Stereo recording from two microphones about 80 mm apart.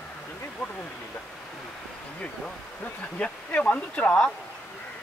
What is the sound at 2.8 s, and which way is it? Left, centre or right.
Speech, centre.